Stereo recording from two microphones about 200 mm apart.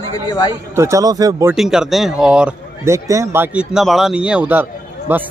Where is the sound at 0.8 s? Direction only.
15° right (ahead or behind).